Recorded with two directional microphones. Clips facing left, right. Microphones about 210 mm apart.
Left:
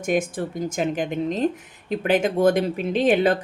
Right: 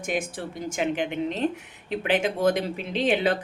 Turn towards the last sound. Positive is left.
turn(degrees=45)  # may be behind; listen again after turning